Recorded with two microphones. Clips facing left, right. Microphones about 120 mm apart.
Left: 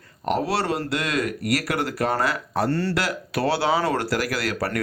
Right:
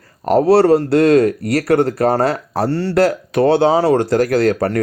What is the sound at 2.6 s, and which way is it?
Speech, 45° left (ahead or behind).